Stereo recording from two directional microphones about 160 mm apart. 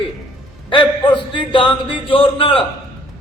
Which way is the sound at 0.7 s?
30° left (ahead or behind).